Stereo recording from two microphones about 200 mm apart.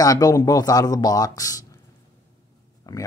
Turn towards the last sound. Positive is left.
turn(degrees=15)  # may be behind; listen again after turning